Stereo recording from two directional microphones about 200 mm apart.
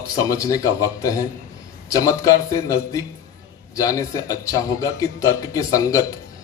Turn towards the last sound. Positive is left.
turn(degrees=15)  # may be behind; listen again after turning